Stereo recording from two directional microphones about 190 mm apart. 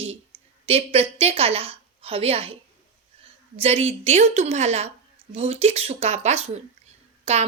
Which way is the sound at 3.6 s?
30° right (ahead or behind).